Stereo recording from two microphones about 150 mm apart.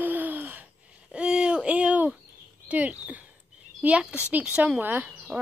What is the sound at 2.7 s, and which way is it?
A woman's voice, 10° right (ahead or behind).